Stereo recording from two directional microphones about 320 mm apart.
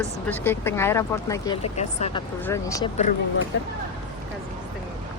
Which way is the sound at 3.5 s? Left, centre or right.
Left.